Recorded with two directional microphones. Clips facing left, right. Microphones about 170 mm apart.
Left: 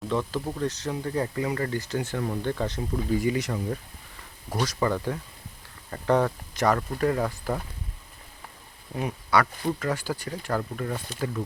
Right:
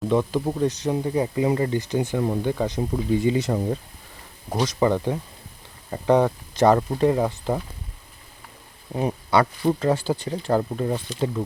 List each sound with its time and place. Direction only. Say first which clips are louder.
0.1 s speech: right 6 dB; 15° right (ahead or behind)
6.5 s speech: right 10 dB; 25° right (ahead or behind)
8.9 s speech: right 4 dB; 30° right (ahead or behind)